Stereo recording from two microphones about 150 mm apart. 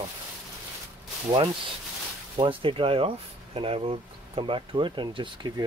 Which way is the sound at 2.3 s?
35° right (ahead or behind).